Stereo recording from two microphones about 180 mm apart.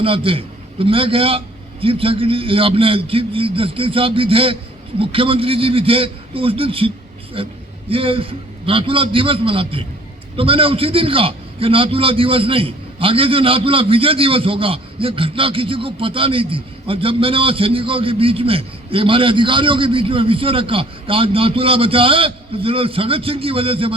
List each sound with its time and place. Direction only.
0.0 s a man's voice: 30° right (ahead or behind)